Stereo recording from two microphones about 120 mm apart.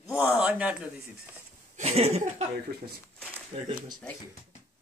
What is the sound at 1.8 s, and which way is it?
Speech, 65° right (ahead or behind).